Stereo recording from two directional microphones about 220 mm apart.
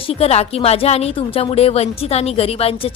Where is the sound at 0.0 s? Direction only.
25° left (ahead or behind).